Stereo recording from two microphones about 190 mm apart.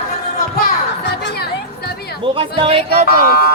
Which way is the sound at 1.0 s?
60° left (ahead or behind).